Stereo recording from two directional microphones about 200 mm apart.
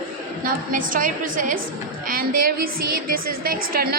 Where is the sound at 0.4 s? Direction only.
45° right (ahead or behind).